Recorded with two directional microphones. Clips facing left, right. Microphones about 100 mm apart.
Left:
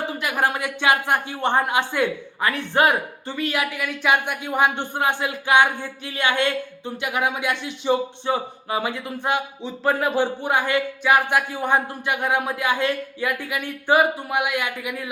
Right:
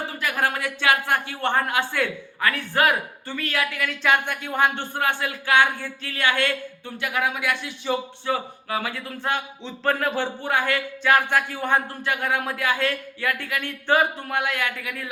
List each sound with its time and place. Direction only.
0.1 s speech: 15° left (ahead or behind)